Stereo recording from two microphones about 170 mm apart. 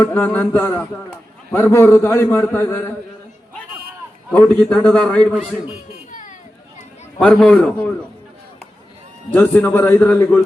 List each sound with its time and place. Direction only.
0.0 s a man's voice: 15° left (ahead or behind)
4.3 s a man's voice: 5° left (ahead or behind)
5.3 s a man's voice: 5° right (ahead or behind)
6.1 s a sound: 50° left (ahead or behind)
7.2 s a man's voice: 5° left (ahead or behind)
9.3 s a man's voice: 10° left (ahead or behind)